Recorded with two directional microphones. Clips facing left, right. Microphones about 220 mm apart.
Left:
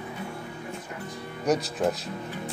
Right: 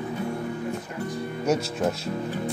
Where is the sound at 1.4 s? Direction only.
Centre (ahead or behind).